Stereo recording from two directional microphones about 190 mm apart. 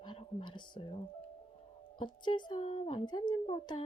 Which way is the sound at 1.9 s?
25° left (ahead or behind).